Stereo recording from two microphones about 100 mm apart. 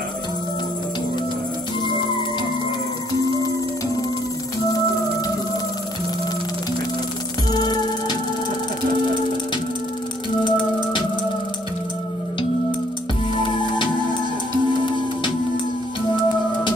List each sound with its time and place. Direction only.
7.5 s music: 45° left (ahead or behind)
10.4 s music: 55° left (ahead or behind)
13.3 s music: 55° left (ahead or behind)